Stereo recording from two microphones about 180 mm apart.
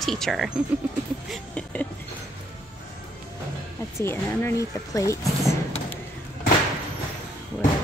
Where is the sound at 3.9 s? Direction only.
15° left (ahead or behind).